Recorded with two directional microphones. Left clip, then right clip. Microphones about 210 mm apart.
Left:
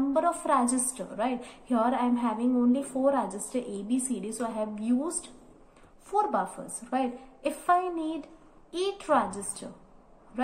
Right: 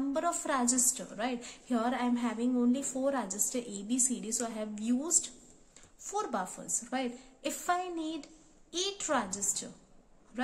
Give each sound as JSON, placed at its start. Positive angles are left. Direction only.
{"t": 0.1, "sound": "a woman's voice", "side_deg": -30}